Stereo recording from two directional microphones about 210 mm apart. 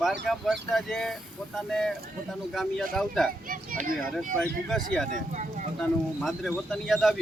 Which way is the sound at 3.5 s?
40° right (ahead or behind).